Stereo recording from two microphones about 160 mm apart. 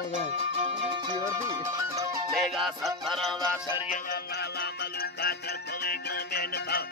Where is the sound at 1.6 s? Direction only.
20° right (ahead or behind).